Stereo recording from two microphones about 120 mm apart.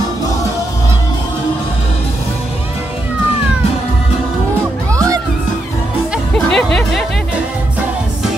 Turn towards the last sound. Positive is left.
turn(degrees=5)  # may be behind; listen again after turning